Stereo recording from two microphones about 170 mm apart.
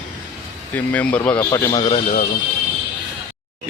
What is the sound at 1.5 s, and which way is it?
Speech, 20° left (ahead or behind).